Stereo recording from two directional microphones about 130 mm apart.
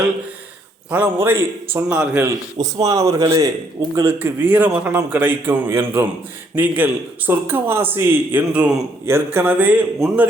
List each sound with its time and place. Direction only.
0.9 s a man's voice: 10° right (ahead or behind)
2.2 s a man's voice: 30° right (ahead or behind); by 9.8 s 10° right (ahead or behind)